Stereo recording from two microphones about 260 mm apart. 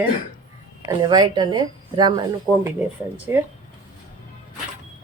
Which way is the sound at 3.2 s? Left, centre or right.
Centre.